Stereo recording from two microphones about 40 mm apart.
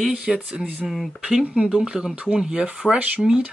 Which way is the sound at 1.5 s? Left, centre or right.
Right.